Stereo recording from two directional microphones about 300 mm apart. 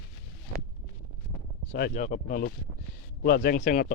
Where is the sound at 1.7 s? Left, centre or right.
Left.